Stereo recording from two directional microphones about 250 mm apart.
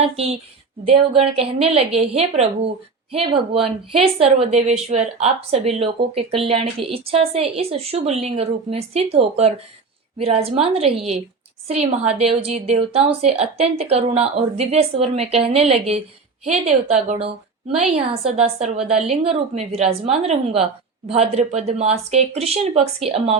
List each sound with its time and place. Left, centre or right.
0.9 s a woman's voice: right